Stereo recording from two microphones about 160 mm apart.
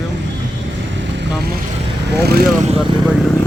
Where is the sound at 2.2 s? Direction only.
75° right (ahead or behind).